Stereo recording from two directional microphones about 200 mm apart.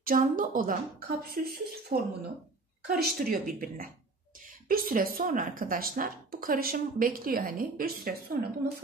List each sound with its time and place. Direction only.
0.0 s speech: 45° right (ahead or behind)